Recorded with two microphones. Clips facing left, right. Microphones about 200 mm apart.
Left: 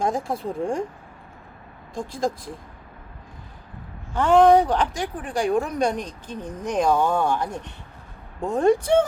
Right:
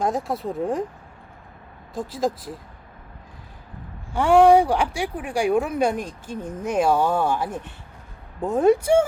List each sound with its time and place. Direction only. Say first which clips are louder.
0.0 s speech: right 1 dB; centre (ahead or behind)
2.0 s speech: right 1 dB; 5° right (ahead or behind)
4.1 s speech: right 1 dB; 10° right (ahead or behind)